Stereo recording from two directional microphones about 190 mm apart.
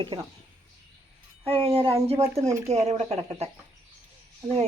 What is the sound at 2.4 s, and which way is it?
Speech, 15° right (ahead or behind).